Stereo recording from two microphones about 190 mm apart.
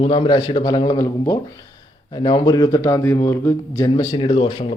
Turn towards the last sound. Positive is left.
turn(degrees=30)  # may be behind; listen again after turning